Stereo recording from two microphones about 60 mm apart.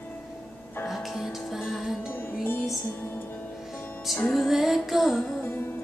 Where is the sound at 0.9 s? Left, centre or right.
Centre.